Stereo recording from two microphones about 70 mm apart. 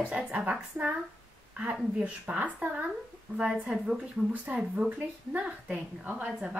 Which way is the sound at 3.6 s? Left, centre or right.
Centre.